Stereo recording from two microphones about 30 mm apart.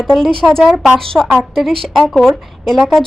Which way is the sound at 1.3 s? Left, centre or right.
Centre.